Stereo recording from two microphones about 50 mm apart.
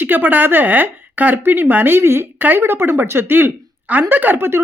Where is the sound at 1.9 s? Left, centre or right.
Right.